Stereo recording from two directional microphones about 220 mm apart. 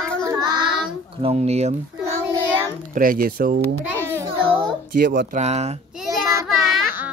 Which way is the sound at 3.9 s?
10° right (ahead or behind).